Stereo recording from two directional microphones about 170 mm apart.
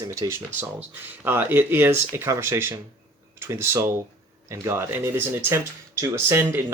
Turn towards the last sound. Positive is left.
turn(degrees=-15)  # may be behind; listen again after turning